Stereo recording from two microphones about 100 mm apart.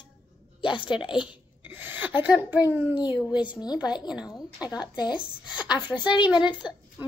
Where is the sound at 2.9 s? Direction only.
50° left (ahead or behind).